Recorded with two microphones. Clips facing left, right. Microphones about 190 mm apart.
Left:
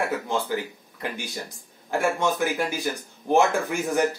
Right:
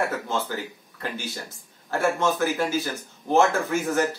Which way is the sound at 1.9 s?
15° left (ahead or behind).